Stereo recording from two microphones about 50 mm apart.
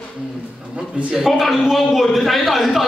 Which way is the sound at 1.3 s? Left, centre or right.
Centre.